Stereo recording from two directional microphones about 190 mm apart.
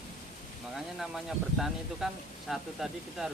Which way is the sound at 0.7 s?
Centre (ahead or behind).